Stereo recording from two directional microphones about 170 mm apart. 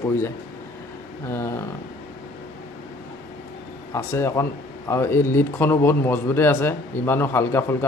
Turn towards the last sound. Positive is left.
turn(degrees=15)  # may be behind; listen again after turning